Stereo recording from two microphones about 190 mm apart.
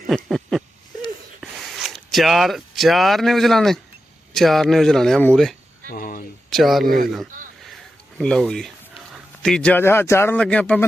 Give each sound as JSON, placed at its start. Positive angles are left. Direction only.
{"t": 0.1, "sound": "a sound", "side_deg": 0}
{"t": 1.4, "sound": "speech", "side_deg": 0}
{"t": 5.9, "sound": "a sound", "side_deg": 50}
{"t": 6.5, "sound": "speech", "side_deg": 0}
{"t": 6.8, "sound": "a man's voice", "side_deg": -50}
{"t": 8.2, "sound": "a man's voice", "side_deg": 5}